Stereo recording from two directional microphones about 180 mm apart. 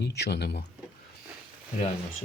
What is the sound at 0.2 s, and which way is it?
Speech, 65° left (ahead or behind).